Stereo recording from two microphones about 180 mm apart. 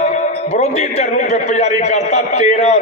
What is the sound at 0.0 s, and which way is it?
A man's voice, 40° left (ahead or behind).